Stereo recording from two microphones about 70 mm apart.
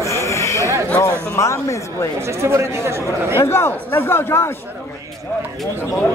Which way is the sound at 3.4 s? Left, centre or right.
Left.